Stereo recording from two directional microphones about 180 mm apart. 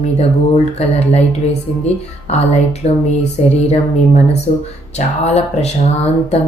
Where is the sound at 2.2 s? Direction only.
35° left (ahead or behind).